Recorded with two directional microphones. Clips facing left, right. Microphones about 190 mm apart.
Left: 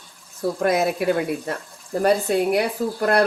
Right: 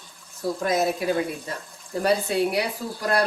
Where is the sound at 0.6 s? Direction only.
60° left (ahead or behind).